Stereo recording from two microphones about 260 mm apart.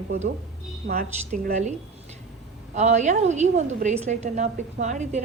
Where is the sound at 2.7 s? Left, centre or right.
Right.